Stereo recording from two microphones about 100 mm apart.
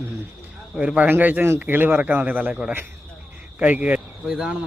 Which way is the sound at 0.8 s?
15° right (ahead or behind).